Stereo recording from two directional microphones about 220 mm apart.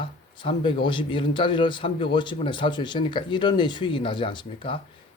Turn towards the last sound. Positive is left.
turn(degrees=20)  # may be behind; listen again after turning